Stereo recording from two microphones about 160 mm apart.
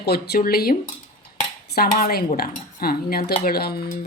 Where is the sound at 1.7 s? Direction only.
70° left (ahead or behind).